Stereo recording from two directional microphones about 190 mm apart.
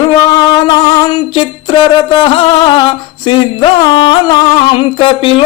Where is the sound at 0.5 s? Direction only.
20° left (ahead or behind).